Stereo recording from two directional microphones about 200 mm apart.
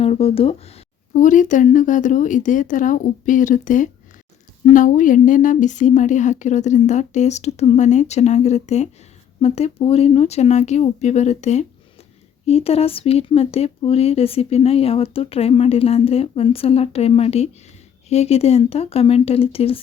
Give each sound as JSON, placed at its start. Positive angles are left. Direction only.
{"t": 0.0, "sound": "a woman's voice", "side_deg": 30}